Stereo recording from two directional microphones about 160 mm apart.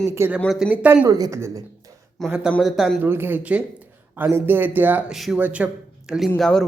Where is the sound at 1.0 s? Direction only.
25° right (ahead or behind).